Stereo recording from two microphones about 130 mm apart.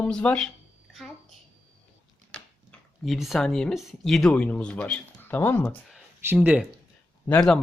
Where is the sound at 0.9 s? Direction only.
Centre (ahead or behind).